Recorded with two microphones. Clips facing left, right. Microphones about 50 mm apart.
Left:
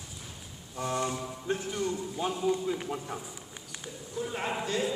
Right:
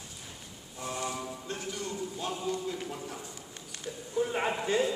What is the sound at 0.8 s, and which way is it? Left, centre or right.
Mantra, left.